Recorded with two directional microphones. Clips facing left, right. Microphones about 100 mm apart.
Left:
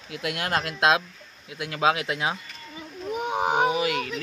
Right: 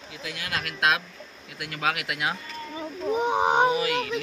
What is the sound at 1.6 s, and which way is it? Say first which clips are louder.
Speech: left 5 dB; 20° left (ahead or behind).